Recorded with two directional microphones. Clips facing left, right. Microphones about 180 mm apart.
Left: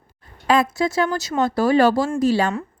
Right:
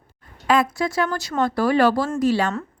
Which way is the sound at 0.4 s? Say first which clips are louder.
Left 1 dB; 30° left (ahead or behind).